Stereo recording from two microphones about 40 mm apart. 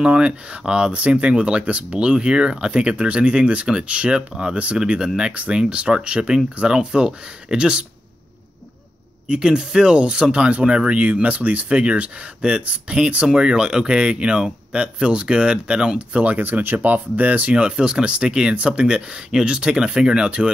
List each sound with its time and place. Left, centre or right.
0.0 s speech: right
9.3 s speech: centre
16.3 s speech: right
17.6 s speech: right